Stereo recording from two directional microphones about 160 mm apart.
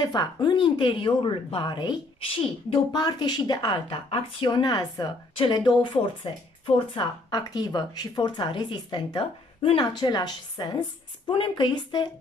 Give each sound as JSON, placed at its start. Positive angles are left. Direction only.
{"t": 0.0, "sound": "a woman's voice", "side_deg": 25}